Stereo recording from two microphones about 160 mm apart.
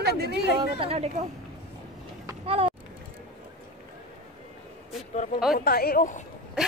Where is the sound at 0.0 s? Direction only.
90° right.